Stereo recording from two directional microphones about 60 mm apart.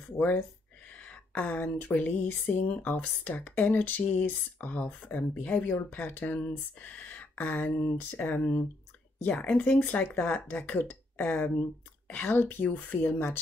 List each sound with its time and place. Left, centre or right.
0.2 s speech: left